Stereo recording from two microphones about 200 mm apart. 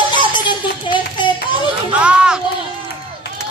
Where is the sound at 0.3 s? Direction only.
25° left (ahead or behind).